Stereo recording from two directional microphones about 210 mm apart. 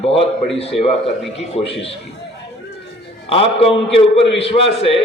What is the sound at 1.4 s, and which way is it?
Speech, 30° left (ahead or behind).